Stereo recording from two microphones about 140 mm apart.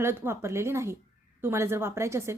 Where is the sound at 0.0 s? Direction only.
15° right (ahead or behind).